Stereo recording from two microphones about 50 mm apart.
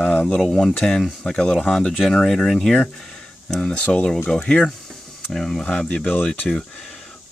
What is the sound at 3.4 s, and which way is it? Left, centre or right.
Speech, centre.